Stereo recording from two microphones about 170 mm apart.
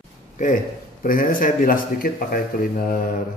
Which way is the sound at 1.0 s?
55° left (ahead or behind).